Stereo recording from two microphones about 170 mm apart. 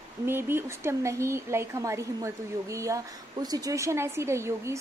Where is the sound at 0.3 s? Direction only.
15° right (ahead or behind).